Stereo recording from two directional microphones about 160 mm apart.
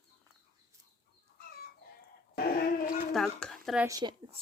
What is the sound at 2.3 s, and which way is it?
Dog, 75° left (ahead or behind).